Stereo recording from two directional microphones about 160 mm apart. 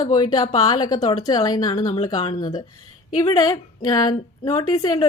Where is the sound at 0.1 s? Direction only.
25° left (ahead or behind).